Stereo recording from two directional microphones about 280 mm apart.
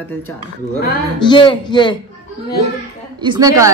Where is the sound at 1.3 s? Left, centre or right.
Centre.